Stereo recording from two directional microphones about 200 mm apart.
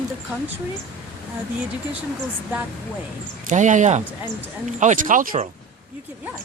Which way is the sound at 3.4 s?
40° right (ahead or behind).